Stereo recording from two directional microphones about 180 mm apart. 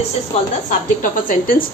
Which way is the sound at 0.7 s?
50° left (ahead or behind).